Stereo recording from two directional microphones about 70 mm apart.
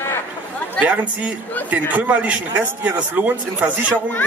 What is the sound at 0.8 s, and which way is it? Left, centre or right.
A man's voice, right.